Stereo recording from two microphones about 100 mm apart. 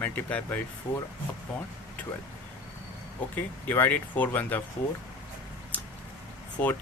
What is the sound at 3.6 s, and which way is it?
Speech, 20° left (ahead or behind).